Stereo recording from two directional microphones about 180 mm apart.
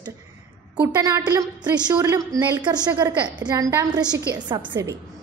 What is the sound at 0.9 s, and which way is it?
A woman's voice, 20° right (ahead or behind).